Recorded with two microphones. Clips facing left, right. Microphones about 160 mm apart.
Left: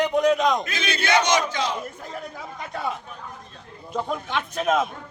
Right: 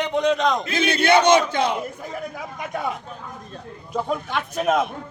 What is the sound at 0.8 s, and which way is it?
Battle cry, 60° right (ahead or behind).